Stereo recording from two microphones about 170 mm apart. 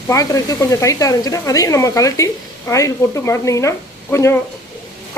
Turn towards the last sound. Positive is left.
turn(degrees=15)  # may be behind; listen again after turning